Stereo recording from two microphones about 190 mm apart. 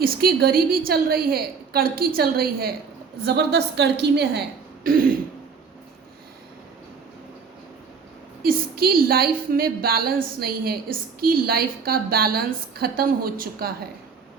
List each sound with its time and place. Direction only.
0.0 s a woman's voice: 50° right (ahead or behind)
3.2 s a woman's voice: 60° right (ahead or behind)
8.4 s a woman's voice: 50° right (ahead or behind)